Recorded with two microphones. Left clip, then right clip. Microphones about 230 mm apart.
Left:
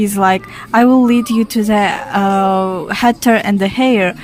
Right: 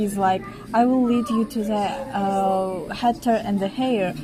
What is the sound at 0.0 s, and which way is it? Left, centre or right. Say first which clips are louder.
Speech: left 8 dB; left.